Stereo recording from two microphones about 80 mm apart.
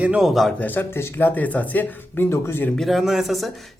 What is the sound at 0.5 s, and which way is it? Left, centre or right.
Speech, left.